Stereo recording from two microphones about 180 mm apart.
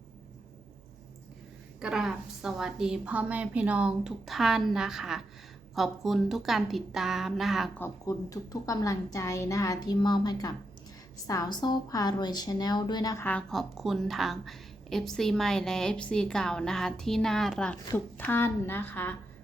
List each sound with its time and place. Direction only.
1.8 s a woman's voice: 5° right (ahead or behind)
7.8 s a woman's voice: 20° left (ahead or behind)
13.2 s a woman's voice: 5° left (ahead or behind)